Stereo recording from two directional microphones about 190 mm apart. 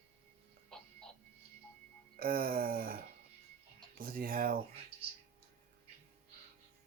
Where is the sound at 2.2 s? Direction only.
50° right (ahead or behind).